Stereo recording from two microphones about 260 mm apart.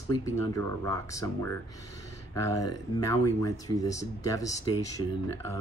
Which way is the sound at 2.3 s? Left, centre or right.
Centre.